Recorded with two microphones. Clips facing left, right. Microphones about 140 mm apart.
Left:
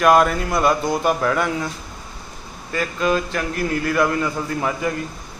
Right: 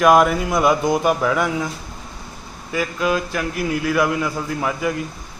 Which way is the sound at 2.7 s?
5° right (ahead or behind).